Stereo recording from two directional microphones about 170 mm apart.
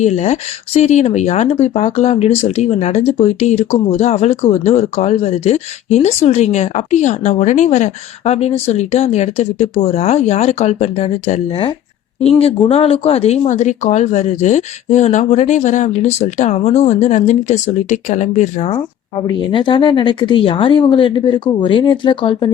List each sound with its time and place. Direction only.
0.0 s speech: 40° left (ahead or behind)
18.7 s a woman's voice: 25° left (ahead or behind)